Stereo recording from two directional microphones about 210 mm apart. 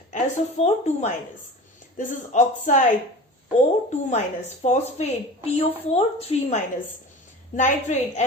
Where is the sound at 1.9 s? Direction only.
35° left (ahead or behind).